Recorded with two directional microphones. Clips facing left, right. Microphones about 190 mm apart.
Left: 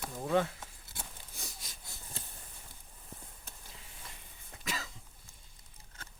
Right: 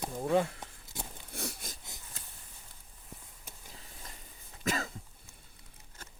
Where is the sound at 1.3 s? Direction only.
65° right (ahead or behind).